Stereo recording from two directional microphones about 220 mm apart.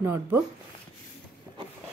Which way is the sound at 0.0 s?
10° right (ahead or behind).